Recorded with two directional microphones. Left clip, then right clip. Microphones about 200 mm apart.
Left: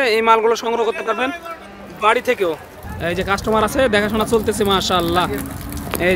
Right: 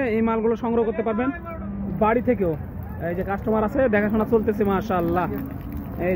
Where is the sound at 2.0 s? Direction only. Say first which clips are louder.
Left 5 dB; 25° left (ahead or behind).